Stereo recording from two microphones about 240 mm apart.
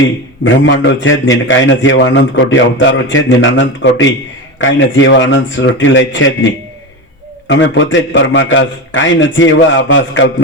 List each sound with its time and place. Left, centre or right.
0.4 s a man's voice: left
7.4 s a man's voice: left